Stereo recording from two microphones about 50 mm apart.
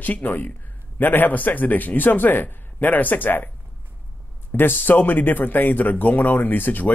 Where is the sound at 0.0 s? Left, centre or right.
Left.